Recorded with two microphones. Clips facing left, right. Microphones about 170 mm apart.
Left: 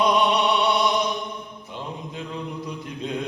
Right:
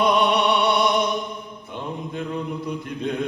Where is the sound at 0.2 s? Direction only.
Centre (ahead or behind).